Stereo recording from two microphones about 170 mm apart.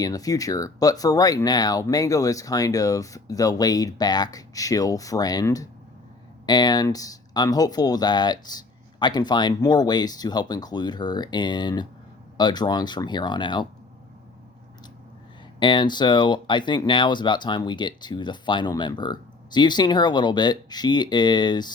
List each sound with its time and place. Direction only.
0.0 s speech: 20° left (ahead or behind)
15.6 s speech: 25° left (ahead or behind)